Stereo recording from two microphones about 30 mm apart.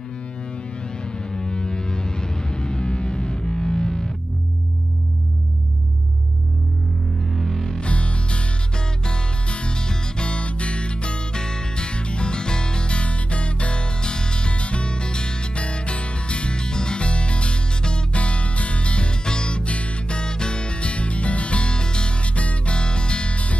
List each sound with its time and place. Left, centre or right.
1.0 s music: left
7.2 s music: centre
7.8 s music: left
11.3 s music: left
19.6 s music: left
22.8 s music: left